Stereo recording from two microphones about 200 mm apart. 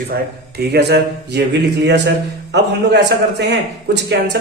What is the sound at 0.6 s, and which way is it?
A man's voice, 55° right (ahead or behind).